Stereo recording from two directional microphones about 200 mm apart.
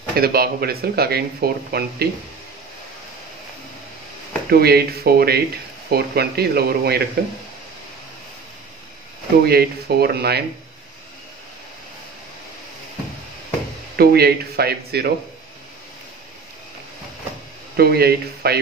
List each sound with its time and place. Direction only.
0.1 s speech: 50° right (ahead or behind)
4.5 s speech: 50° right (ahead or behind)
9.4 s speech: 50° right (ahead or behind)
13.9 s speech: 50° right (ahead or behind)
17.7 s speech: 50° right (ahead or behind)